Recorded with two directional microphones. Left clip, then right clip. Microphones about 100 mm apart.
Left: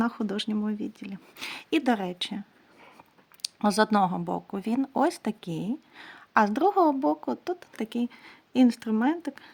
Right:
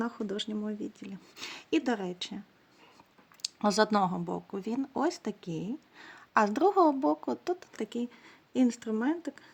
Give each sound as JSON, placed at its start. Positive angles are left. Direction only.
{"t": 0.0, "sound": "speech", "side_deg": 55}
{"t": 0.9, "sound": "speech", "side_deg": 30}
{"t": 3.4, "sound": "speech", "side_deg": 20}
{"t": 4.3, "sound": "speech", "side_deg": 45}